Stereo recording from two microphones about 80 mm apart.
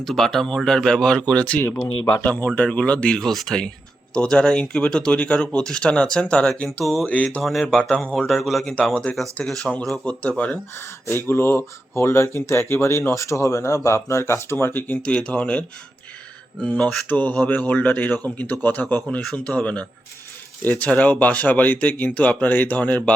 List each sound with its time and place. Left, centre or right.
0.0 s speech: centre
7.4 s speech: centre
10.1 s speech: centre
10.8 s speech: left